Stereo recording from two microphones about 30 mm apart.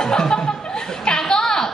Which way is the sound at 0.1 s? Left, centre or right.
Left.